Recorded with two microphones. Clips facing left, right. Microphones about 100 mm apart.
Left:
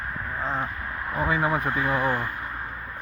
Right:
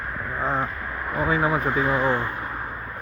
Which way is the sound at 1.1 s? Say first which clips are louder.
Right 2 dB; 15° right (ahead or behind).